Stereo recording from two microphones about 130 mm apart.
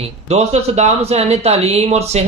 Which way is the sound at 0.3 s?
55° right (ahead or behind).